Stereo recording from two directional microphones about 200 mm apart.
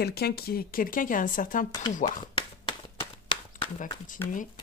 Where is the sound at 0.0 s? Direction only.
50° left (ahead or behind).